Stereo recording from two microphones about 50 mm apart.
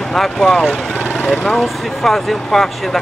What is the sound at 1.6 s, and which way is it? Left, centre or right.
Speech, centre.